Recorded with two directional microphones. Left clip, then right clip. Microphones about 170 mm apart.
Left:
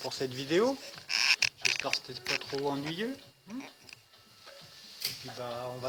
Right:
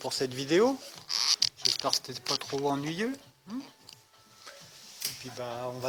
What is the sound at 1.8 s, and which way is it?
Speech, 55° right (ahead or behind).